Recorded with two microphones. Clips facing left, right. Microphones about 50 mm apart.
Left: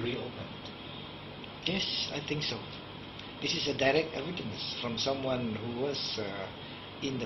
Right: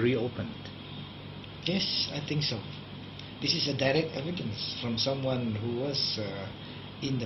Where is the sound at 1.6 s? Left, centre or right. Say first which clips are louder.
Right 2 dB; centre.